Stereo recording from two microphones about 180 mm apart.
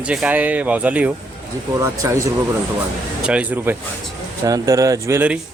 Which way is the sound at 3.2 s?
10° right (ahead or behind).